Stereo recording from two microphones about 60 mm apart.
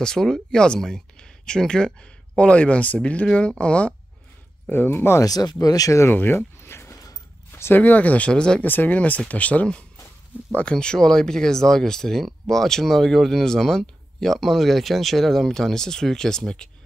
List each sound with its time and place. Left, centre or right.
0.0 s speech: centre
4.6 s speech: left
5.2 s speech: left
6.0 s speech: left
7.7 s speech: left
8.3 s speech: centre
8.6 s speech: left; by 16.6 s centre